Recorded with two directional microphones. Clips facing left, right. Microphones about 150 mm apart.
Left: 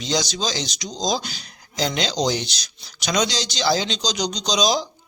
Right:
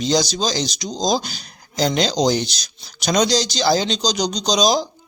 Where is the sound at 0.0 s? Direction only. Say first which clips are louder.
Right 5 dB; 40° right (ahead or behind).